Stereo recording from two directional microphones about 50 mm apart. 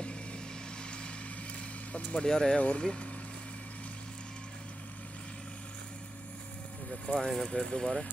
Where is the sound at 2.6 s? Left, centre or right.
Left.